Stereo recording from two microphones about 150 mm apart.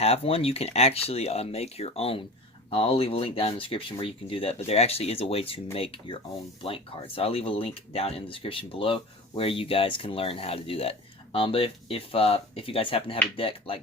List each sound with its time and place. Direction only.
0.0 s speech: 40° left (ahead or behind)